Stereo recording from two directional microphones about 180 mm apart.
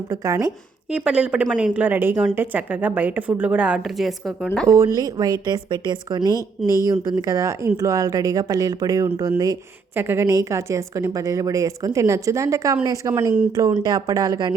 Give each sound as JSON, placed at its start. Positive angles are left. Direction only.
{"t": 0.1, "sound": "a woman's voice", "side_deg": -15}
{"t": 4.7, "sound": "a woman's voice", "side_deg": -15}
{"t": 6.6, "sound": "speech", "side_deg": 0}
{"t": 7.1, "sound": "a woman's voice", "side_deg": -20}